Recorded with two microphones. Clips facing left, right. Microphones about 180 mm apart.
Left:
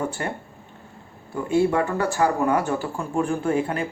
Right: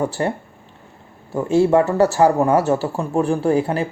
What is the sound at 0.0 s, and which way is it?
Speech, 35° right (ahead or behind).